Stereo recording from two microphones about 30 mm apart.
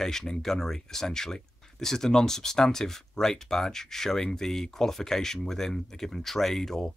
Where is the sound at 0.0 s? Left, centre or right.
Centre.